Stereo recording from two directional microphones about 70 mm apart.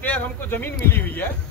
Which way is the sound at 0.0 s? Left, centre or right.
Left.